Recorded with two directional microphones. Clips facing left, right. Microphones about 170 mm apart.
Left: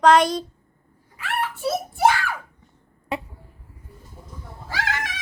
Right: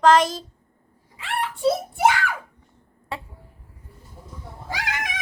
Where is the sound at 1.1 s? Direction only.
25° right (ahead or behind).